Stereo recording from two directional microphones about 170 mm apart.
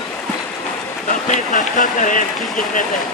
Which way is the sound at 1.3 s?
50° left (ahead or behind).